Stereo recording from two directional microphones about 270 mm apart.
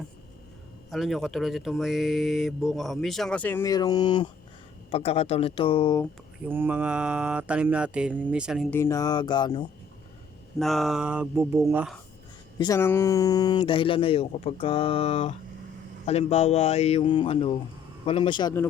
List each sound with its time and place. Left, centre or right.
0.9 s speech: centre
6.5 s speech: centre
8.8 s music: centre
10.6 s speech: centre
12.5 s speech: centre
18.0 s music: centre